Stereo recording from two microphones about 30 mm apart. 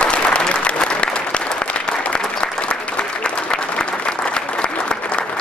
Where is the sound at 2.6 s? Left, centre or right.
Left.